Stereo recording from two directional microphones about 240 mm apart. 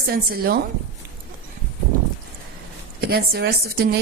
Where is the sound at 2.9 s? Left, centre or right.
Right.